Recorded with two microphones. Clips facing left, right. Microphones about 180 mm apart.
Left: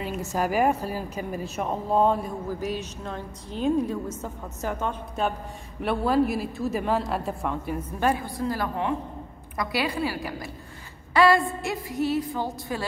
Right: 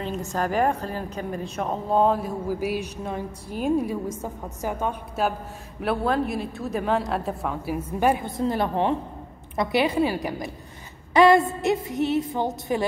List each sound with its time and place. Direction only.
0.0 s a woman's voice: 10° left (ahead or behind); by 12.8 s 20° right (ahead or behind)